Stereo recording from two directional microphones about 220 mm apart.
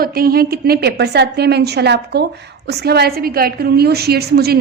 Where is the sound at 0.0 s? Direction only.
45° right (ahead or behind).